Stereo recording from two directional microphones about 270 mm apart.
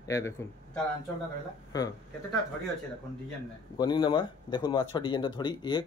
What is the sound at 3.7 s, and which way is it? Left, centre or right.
Speech, centre.